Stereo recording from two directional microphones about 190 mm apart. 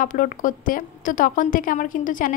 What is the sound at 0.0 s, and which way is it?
A woman's voice, 45° left (ahead or behind).